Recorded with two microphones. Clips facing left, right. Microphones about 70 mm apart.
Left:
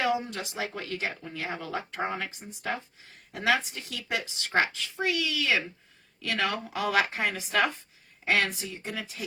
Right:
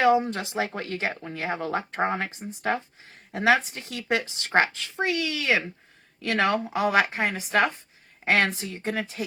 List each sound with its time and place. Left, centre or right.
0.0 s a woman's voice: right
8.2 s a woman's voice: right